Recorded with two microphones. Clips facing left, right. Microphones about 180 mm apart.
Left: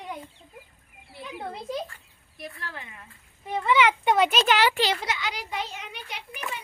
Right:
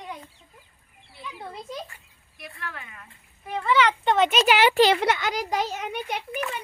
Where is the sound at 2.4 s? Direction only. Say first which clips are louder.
Even; 25° left (ahead or behind); by 4.7 s 10° right (ahead or behind).